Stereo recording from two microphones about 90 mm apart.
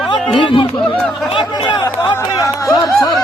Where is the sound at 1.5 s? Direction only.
60° left (ahead or behind).